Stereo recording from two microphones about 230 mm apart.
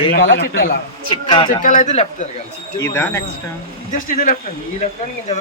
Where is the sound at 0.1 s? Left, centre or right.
Left.